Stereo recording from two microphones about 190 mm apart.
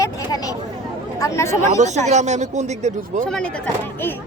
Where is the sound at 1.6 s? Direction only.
40° right (ahead or behind).